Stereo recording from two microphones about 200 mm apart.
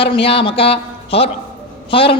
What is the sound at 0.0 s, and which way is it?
A man's voice, 25° left (ahead or behind).